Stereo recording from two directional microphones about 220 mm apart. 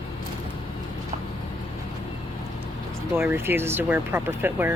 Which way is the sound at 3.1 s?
10° right (ahead or behind).